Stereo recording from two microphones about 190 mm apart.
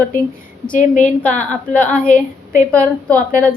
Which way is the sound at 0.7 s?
45° left (ahead or behind).